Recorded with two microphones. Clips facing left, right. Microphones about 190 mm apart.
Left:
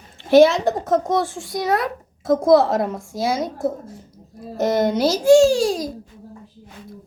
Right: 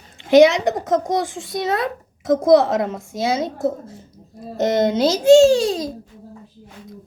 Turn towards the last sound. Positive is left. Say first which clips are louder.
# right 2 dB
turn(degrees=-20)  # may be behind; listen again after turning